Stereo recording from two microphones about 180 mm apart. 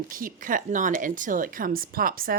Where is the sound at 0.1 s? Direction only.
50° right (ahead or behind).